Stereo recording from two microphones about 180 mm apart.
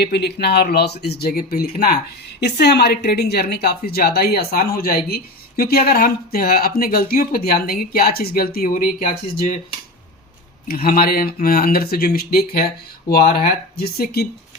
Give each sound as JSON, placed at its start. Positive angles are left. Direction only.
{"t": 0.0, "sound": "speech", "side_deg": 65}
{"t": 10.7, "sound": "speech", "side_deg": 55}